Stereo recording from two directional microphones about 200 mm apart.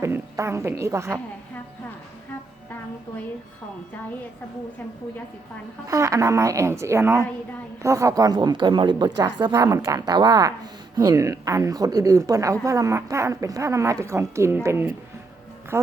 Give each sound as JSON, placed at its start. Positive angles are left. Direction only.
{"t": 0.0, "sound": "a woman's voice", "side_deg": -15}
{"t": 5.9, "sound": "a woman's voice", "side_deg": -15}